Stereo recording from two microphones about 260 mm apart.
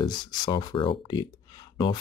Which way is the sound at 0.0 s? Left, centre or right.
Centre.